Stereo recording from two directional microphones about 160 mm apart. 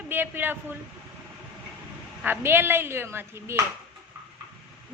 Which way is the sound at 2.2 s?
15° right (ahead or behind).